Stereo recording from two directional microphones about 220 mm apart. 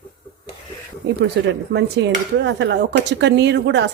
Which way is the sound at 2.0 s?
55° right (ahead or behind).